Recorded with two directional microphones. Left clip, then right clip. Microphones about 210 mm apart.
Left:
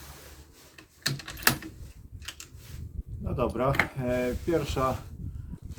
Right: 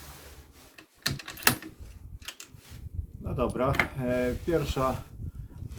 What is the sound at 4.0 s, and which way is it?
Speech, 20° left (ahead or behind).